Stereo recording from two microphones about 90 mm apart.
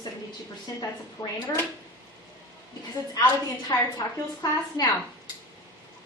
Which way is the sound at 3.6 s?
45° left (ahead or behind).